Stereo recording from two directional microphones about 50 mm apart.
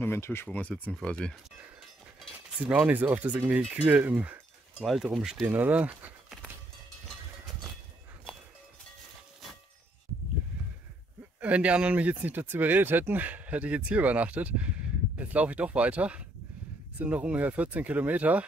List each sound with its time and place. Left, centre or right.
0.0 s speech: left
0.5 s speech: left
2.6 s speech: right
5.5 s speech: right
8.3 s livestock: left
11.4 s speech: right